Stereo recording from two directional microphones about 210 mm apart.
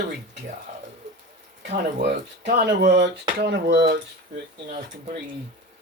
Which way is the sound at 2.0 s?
55° right (ahead or behind).